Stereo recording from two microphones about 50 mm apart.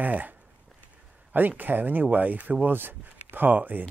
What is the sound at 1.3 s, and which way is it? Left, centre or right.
Speech, right.